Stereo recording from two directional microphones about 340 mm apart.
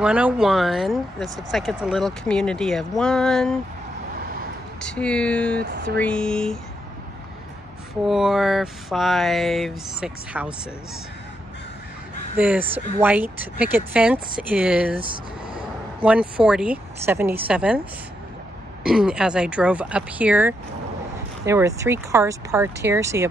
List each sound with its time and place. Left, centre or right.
0.0 s speech: centre
4.8 s speech: centre
5.6 s speech: right
5.9 s speech: centre
8.1 s speech: centre
12.4 s speech: centre
16.0 s speech: centre
18.9 s speech: centre